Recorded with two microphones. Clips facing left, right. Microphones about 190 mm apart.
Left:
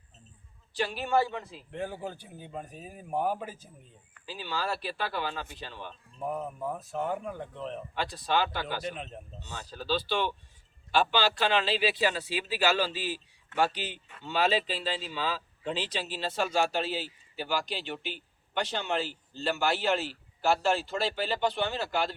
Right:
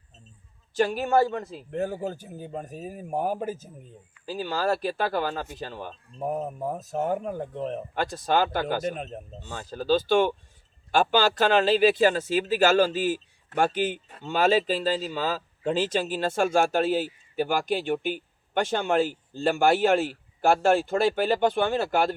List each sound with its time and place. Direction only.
0.7 s speech: 45° right (ahead or behind)